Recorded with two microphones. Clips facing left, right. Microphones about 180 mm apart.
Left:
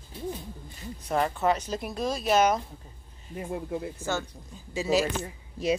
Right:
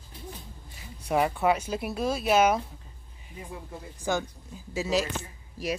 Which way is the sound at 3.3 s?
60° left (ahead or behind).